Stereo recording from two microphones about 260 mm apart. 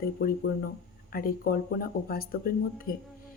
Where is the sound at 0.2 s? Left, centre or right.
Left.